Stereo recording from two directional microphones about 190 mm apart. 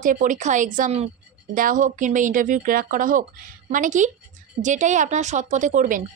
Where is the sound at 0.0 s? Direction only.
45° right (ahead or behind).